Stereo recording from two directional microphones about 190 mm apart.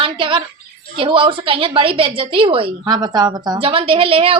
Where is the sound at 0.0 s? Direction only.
25° right (ahead or behind).